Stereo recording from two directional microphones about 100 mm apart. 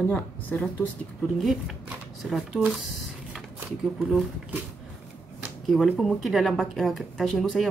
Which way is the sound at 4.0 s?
5° right (ahead or behind).